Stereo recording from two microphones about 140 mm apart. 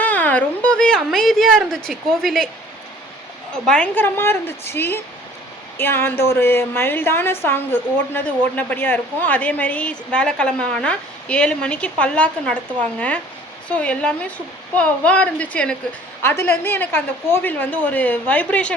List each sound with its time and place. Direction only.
0.0 s a woman's voice: 10° left (ahead or behind)
3.5 s a woman's voice: 5° left (ahead or behind)
13.7 s a woman's voice: 10° left (ahead or behind)